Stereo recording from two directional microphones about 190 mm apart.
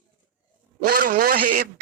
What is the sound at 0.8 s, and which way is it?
Speech, 50° right (ahead or behind).